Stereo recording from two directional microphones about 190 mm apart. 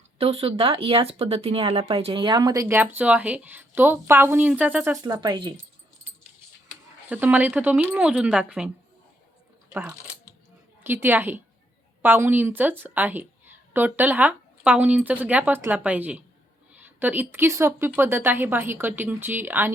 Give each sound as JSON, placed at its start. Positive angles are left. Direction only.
{"t": 0.2, "sound": "speech", "side_deg": -30}
{"t": 5.0, "sound": "speech", "side_deg": -20}
{"t": 7.1, "sound": "speech", "side_deg": -10}
{"t": 10.8, "sound": "speech", "side_deg": -10}